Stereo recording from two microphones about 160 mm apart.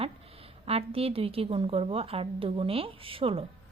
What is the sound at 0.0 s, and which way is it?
A woman's voice, 35° right (ahead or behind).